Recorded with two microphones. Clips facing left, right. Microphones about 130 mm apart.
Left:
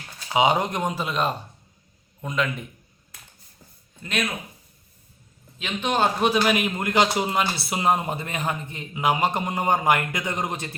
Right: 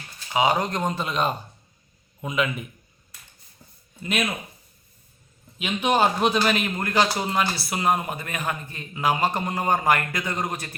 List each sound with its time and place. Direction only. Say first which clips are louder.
0.3 s a man's voice: left 1 dB; 20° left (ahead or behind); by 2.6 s 5° right (ahead or behind)
4.0 s a man's voice: right 1 dB; 10° right (ahead or behind)
5.5 s a man's voice: right 2 dB; 10° right (ahead or behind); by 10.8 s 20° left (ahead or behind)